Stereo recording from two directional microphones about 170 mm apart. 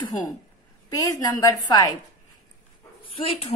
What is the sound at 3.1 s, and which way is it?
Speech, 35° left (ahead or behind).